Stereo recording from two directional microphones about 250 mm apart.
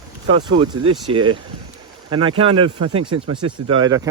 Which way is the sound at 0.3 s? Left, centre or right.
Centre.